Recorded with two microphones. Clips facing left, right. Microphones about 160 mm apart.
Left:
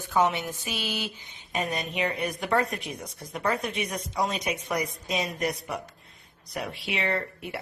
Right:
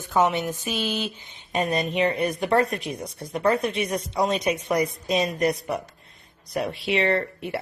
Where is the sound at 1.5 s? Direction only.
30° right (ahead or behind).